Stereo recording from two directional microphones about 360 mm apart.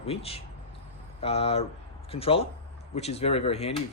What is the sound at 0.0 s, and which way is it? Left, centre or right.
Speech, centre.